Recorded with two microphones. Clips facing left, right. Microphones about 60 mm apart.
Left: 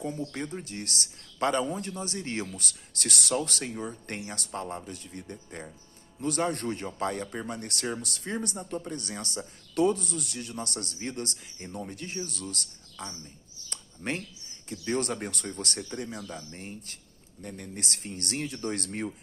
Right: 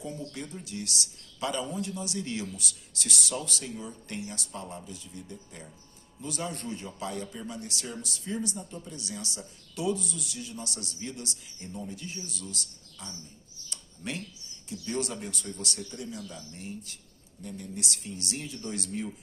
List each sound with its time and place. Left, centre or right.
0.2 s speech: left
13.7 s a sound: left
14.7 s speech: left